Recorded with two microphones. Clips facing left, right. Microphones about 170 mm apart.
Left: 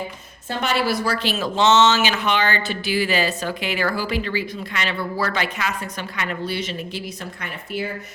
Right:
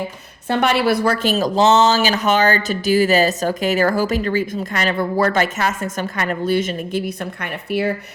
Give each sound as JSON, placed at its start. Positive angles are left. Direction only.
{"t": 0.4, "sound": "speech", "side_deg": -60}